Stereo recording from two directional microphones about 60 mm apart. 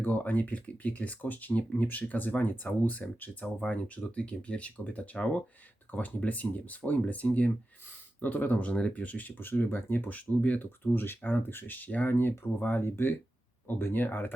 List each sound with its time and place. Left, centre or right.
0.0 s speech: left
12.1 s speech: left